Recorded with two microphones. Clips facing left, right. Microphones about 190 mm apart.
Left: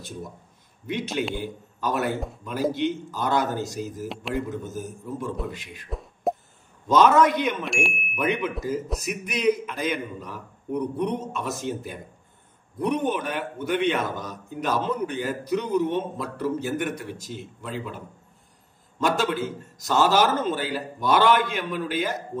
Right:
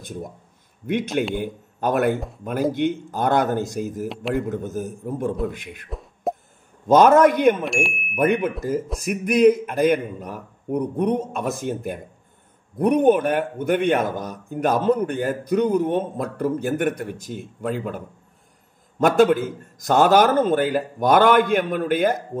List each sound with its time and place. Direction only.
1.3 s a man's voice: 55° right (ahead or behind)
4.1 s chime: centre (ahead or behind)
4.4 s a man's voice: 55° right (ahead or behind)
5.9 s plop: centre (ahead or behind)
6.9 s a man's voice: 50° right (ahead or behind)
7.6 s chime: centre (ahead or behind)
8.1 s a man's voice: 50° right (ahead or behind)